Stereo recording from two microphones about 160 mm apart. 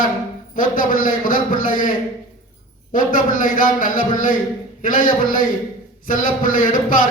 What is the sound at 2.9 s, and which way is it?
A man's voice, 55° left (ahead or behind).